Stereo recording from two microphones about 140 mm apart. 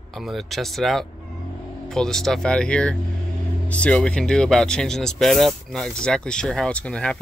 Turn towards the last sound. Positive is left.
turn(degrees=5)  # may be behind; listen again after turning